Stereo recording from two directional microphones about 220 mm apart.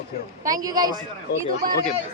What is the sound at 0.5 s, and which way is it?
Speech, 15° right (ahead or behind).